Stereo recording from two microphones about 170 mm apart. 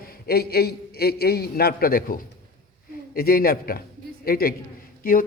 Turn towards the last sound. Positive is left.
turn(degrees=55)  # may be behind; listen again after turning